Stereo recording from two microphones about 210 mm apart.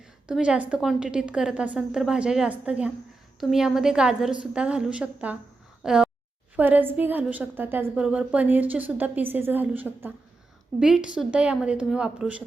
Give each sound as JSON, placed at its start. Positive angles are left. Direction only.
{"t": 0.3, "sound": "a woman's voice", "side_deg": -5}